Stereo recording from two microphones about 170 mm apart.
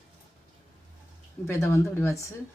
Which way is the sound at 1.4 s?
15° left (ahead or behind).